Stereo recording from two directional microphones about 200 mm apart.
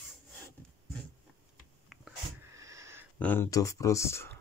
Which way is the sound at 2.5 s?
15° right (ahead or behind).